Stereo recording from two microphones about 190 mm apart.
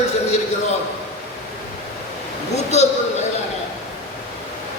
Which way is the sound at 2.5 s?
35° left (ahead or behind).